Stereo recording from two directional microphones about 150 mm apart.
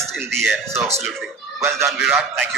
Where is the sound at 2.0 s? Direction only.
5° right (ahead or behind).